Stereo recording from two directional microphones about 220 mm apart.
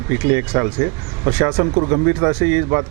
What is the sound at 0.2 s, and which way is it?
Speech, 20° right (ahead or behind).